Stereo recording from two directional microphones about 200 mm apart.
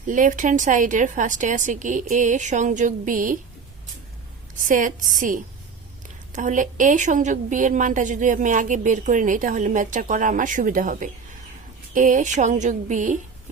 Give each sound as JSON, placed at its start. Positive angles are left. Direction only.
{"t": 0.1, "sound": "a woman's voice", "side_deg": -40}
{"t": 4.5, "sound": "a woman's voice", "side_deg": -40}